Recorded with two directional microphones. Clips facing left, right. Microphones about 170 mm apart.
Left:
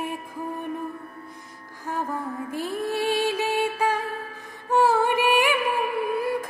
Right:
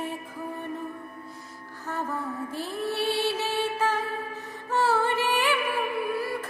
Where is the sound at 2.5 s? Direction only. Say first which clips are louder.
Left 5 dB; 15° left (ahead or behind).